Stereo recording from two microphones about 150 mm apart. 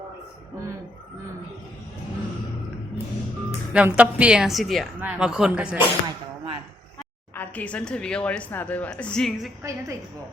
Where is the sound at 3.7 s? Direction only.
10° right (ahead or behind).